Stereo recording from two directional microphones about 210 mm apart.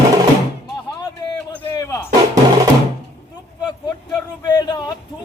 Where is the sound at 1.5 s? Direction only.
10° left (ahead or behind).